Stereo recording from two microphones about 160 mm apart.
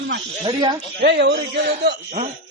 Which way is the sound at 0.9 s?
90° right.